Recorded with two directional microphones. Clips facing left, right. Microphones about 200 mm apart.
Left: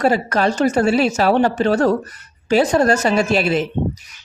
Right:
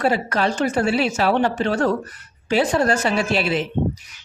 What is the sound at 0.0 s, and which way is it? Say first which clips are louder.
A woman's voice: left 3 dB; 40° left (ahead or behind).